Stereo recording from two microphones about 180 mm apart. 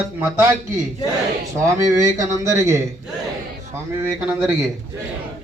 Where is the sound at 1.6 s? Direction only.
15° right (ahead or behind).